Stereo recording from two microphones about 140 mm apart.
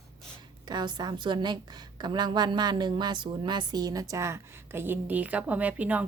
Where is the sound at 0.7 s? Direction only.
30° right (ahead or behind).